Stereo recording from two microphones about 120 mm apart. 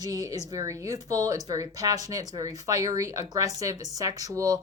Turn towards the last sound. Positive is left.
turn(degrees=-30)  # may be behind; listen again after turning